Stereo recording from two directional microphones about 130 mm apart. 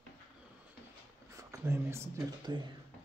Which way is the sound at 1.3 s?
20° right (ahead or behind).